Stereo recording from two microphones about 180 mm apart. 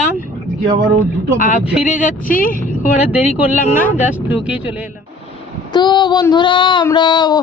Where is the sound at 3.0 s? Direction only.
5° right (ahead or behind).